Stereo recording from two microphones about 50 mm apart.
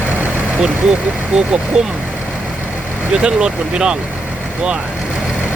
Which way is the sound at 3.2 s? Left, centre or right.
Centre.